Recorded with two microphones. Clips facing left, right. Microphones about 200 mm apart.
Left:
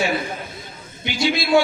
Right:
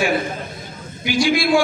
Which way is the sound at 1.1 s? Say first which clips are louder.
Right 8 dB; 25° left (ahead or behind).